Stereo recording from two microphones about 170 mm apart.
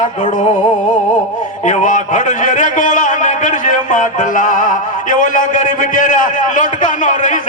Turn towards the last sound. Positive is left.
turn(degrees=50)  # may be behind; listen again after turning